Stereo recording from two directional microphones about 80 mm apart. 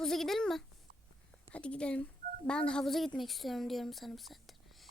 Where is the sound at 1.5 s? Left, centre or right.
Centre.